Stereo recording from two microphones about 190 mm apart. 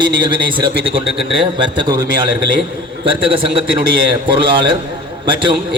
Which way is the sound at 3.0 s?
25° right (ahead or behind).